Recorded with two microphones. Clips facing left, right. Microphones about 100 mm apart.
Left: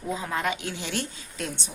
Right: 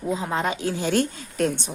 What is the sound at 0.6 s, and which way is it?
Speech, 40° right (ahead or behind).